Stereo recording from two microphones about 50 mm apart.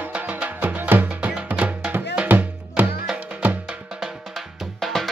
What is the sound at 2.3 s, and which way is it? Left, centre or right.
Music, right.